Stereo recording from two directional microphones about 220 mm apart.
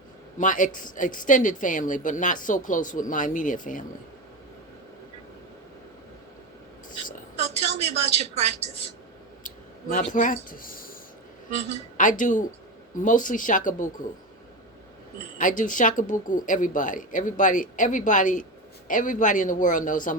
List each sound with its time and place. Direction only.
0.3 s speech: 35° left (ahead or behind)
7.8 s a sound: 30° right (ahead or behind)
9.9 s speech: 35° left (ahead or behind)
11.9 s speech: 35° left (ahead or behind)
15.4 s speech: 35° left (ahead or behind)